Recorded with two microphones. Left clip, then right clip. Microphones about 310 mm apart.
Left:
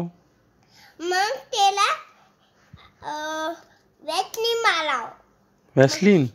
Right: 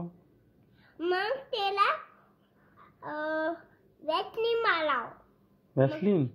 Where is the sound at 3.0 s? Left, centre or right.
Centre.